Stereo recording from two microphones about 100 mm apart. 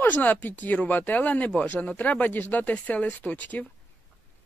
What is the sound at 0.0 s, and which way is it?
Speech, 15° left (ahead or behind).